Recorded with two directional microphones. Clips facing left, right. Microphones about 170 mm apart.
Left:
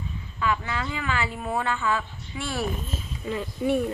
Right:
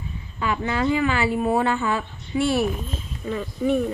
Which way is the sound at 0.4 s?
25° right (ahead or behind).